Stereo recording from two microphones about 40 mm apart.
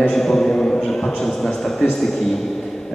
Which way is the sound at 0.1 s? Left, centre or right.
Centre.